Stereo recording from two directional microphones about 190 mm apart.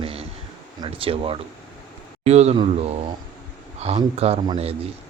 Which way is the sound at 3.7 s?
35° right (ahead or behind).